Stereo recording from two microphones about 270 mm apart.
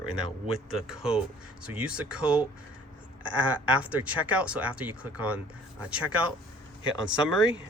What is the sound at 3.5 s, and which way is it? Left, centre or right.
Speech, centre.